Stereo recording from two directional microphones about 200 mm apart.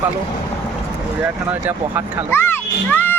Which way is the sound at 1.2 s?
10° right (ahead or behind).